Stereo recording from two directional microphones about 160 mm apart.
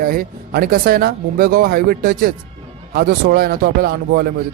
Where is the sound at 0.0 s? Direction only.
65° right (ahead or behind).